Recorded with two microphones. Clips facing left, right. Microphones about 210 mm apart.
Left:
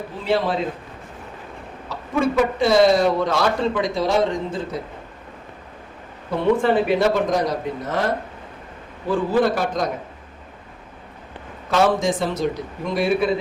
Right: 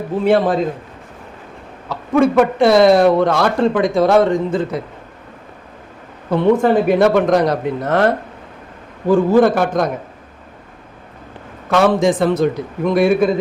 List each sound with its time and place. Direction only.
0.3 s a man's voice: 50° right (ahead or behind)
2.1 s speech: 55° right (ahead or behind)
6.6 s speech: 45° right (ahead or behind); by 8.1 s 65° right (ahead or behind)
9.0 s a man's voice: 45° right (ahead or behind)
11.7 s speech: 60° right (ahead or behind)